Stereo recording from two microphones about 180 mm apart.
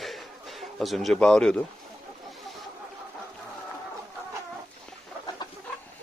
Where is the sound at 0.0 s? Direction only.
Centre (ahead or behind).